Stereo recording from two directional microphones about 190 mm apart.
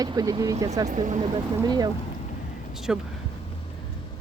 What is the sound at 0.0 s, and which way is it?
Speech, 20° right (ahead or behind).